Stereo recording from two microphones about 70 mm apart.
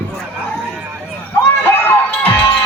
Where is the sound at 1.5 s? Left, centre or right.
Left.